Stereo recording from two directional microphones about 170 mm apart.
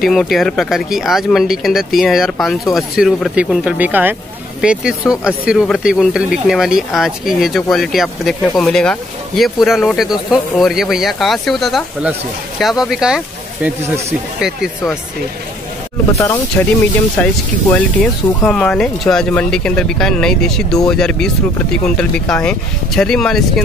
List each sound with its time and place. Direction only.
0.0 s speech: centre (ahead or behind)
16.1 s speech: 15° left (ahead or behind)